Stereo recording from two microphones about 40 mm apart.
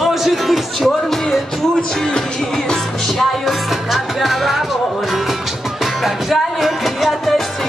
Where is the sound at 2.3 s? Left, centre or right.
Centre.